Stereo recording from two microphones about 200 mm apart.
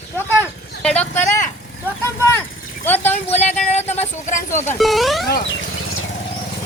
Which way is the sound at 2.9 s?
10° left (ahead or behind).